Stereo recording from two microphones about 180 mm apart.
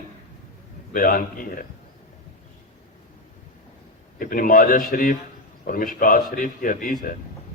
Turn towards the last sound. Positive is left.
turn(degrees=50)  # may be behind; listen again after turning